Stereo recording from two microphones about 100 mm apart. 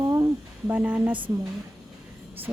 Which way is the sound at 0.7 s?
15° right (ahead or behind).